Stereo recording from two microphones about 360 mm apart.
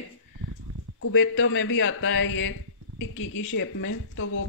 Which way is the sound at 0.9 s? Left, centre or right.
Left.